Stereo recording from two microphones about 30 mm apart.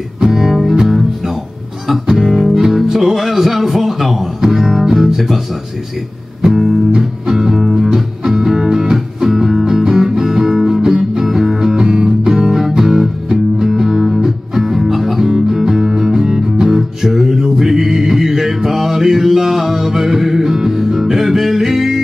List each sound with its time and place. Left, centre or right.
0.3 s music: centre
2.7 s music: centre
6.4 s music: centre